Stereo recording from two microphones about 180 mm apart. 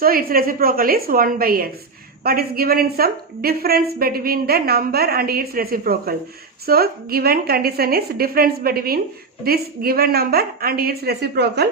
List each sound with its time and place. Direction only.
0.0 s a woman's voice: 55° right (ahead or behind)